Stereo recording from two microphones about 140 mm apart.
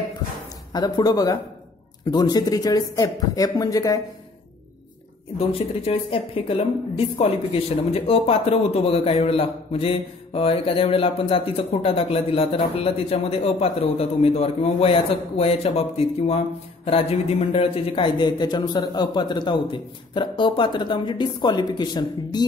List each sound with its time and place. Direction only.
0.7 s speech: 30° left (ahead or behind)
5.4 s a man's voice: 45° left (ahead or behind)